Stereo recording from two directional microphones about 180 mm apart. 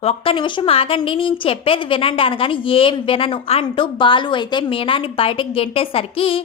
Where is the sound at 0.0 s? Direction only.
30° left (ahead or behind).